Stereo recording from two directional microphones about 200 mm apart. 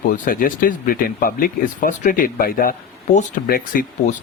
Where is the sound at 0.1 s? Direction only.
45° left (ahead or behind).